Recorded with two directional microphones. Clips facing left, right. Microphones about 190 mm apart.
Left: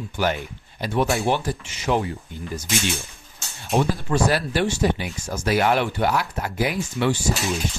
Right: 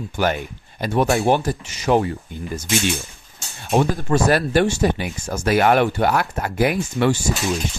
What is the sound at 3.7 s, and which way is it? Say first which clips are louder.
Speech: right 3 dB; 50° right (ahead or behind).